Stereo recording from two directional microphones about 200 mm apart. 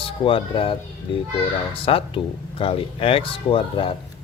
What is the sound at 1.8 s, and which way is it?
Speech, 30° left (ahead or behind).